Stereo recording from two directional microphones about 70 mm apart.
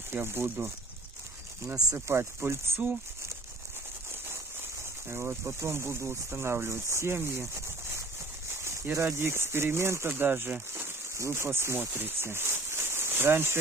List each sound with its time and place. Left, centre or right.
0.1 s speech: right
2.0 s speech: right
5.0 s speech: right